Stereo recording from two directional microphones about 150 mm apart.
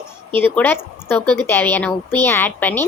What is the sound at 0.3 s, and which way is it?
A woman's voice, 15° left (ahead or behind).